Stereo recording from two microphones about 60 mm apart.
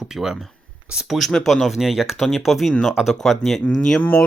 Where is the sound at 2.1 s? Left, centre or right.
Centre.